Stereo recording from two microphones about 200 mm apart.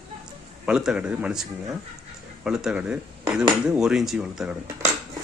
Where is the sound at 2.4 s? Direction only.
5° right (ahead or behind).